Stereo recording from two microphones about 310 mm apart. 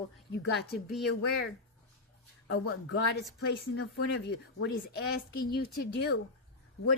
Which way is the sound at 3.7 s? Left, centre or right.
Left.